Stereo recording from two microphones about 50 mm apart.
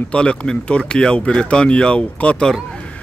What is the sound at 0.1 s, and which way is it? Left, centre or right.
Speech, left.